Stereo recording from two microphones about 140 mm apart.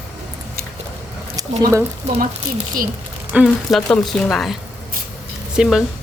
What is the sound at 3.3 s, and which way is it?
Speech, 10° right (ahead or behind).